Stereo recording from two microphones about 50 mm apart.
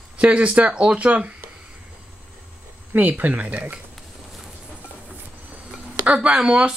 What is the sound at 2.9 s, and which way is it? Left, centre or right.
Speech, right.